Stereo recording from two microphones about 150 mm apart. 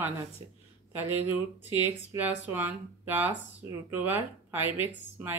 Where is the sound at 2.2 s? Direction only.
10° right (ahead or behind).